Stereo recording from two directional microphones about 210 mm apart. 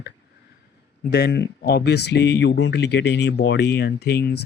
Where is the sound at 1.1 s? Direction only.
50° left (ahead or behind).